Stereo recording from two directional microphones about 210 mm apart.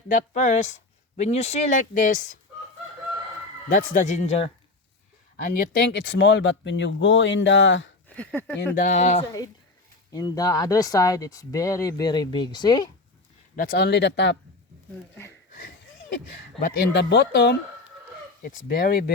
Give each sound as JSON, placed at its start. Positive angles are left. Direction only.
{"t": 0.1, "sound": "speech", "side_deg": 35}
{"t": 3.9, "sound": "speech", "side_deg": 35}
{"t": 5.4, "sound": "speech", "side_deg": 45}
{"t": 8.0, "sound": "speech", "side_deg": 5}
{"t": 8.5, "sound": "speech", "side_deg": 40}
{"t": 10.1, "sound": "speech", "side_deg": 20}
{"t": 13.6, "sound": "speech", "side_deg": 45}
{"t": 16.6, "sound": "speech", "side_deg": 45}